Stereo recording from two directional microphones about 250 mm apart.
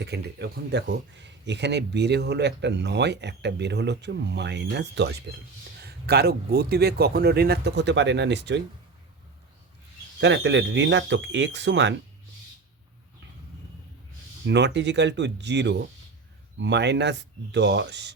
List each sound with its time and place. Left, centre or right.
0.0 s speech: right
10.2 s speech: right
14.4 s speech: right